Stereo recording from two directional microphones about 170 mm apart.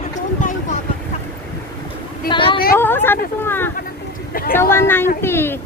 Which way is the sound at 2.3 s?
30° left (ahead or behind).